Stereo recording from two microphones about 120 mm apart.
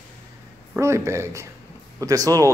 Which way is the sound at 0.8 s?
25° right (ahead or behind).